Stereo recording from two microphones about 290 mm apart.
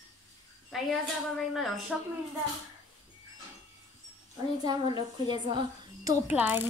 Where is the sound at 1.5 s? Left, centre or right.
Centre.